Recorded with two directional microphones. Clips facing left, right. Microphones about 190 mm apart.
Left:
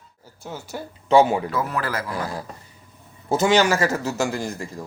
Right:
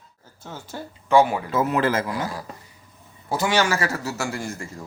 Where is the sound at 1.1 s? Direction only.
25° left (ahead or behind).